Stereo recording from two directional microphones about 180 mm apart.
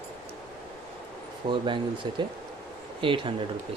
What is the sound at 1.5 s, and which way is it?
Speech, 25° right (ahead or behind).